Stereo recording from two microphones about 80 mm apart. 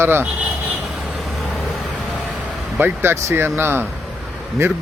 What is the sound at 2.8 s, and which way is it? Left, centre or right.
Speech, right.